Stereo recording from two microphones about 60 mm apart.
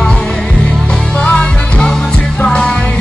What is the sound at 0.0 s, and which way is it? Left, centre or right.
Music, centre.